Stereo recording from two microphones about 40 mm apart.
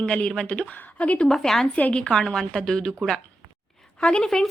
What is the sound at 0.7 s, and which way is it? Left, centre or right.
Speech, left.